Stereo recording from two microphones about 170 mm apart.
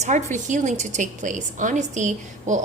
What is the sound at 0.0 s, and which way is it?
A woman's voice, 45° right (ahead or behind).